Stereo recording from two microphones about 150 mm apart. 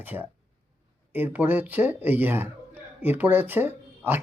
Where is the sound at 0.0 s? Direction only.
10° right (ahead or behind).